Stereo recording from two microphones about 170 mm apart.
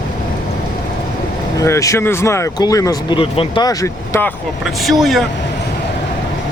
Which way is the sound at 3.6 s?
15° left (ahead or behind).